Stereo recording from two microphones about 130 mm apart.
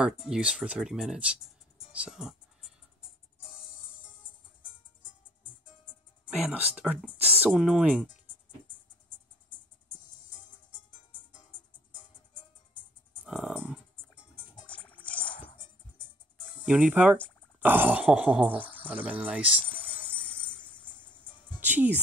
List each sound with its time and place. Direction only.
0.0 s speech: 5° right (ahead or behind)
6.2 s grunt: 10° right (ahead or behind)
7.4 s speech: 5° right (ahead or behind)
12.7 s music: 5° right (ahead or behind)
14.7 s music: 10° left (ahead or behind)
15.2 s music: 40° left (ahead or behind)
16.6 s grunt: 10° right (ahead or behind)
20.5 s music: 10° left (ahead or behind)
21.5 s music: 15° right (ahead or behind)